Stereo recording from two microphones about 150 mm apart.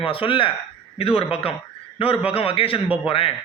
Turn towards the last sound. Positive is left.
turn(degrees=40)  # may be behind; listen again after turning